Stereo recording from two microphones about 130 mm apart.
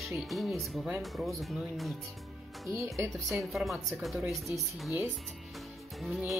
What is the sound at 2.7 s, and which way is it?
Speech, 20° right (ahead or behind).